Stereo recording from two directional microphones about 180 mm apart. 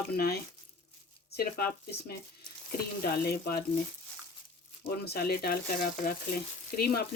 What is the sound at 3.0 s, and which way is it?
Speech, 55° left (ahead or behind).